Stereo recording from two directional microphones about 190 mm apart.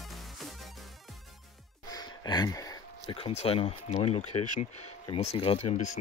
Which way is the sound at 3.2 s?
30° left (ahead or behind).